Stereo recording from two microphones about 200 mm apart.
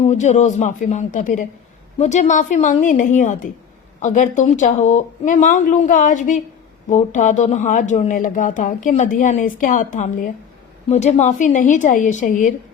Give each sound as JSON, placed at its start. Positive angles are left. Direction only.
{"t": 0.0, "sound": "speech", "side_deg": 35}